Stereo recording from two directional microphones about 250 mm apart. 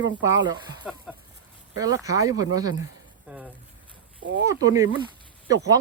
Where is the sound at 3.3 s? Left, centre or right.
Centre.